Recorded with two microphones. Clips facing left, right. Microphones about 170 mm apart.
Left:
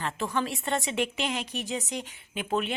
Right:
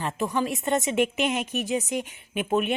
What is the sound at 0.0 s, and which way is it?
A woman's voice, 15° right (ahead or behind).